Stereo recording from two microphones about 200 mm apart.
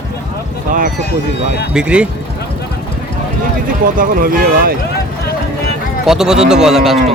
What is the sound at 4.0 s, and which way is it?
Speech, 45° right (ahead or behind).